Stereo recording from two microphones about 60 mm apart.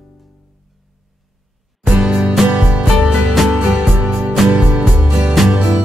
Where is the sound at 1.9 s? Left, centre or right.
Centre.